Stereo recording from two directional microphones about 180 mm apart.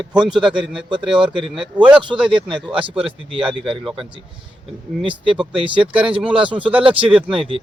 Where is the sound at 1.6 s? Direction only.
5° right (ahead or behind).